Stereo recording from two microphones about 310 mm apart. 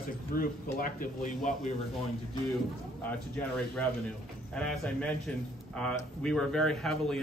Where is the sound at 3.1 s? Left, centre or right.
Centre.